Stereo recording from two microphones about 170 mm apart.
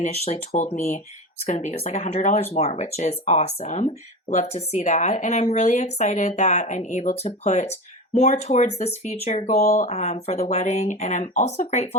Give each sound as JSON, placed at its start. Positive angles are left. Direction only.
{"t": 0.0, "sound": "speech", "side_deg": 45}